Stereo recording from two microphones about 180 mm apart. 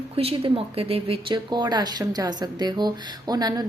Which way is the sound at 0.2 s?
30° right (ahead or behind).